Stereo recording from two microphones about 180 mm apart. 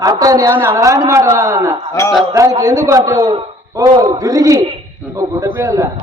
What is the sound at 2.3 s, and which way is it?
A man's voice, 15° right (ahead or behind).